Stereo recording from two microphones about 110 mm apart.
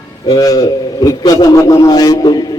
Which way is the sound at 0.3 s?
35° left (ahead or behind).